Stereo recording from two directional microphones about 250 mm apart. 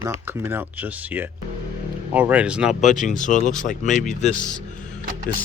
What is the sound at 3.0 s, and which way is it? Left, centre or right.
Speech, left.